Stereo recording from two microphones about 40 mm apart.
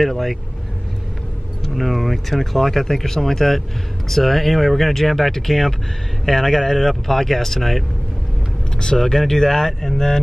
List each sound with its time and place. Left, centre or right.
0.0 s speech: centre
1.6 s speech: centre
8.7 s speech: centre